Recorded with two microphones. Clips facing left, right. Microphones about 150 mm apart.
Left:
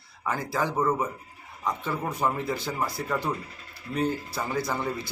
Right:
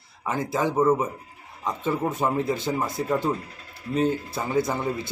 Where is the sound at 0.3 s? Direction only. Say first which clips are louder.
Right 3 dB; 20° right (ahead or behind).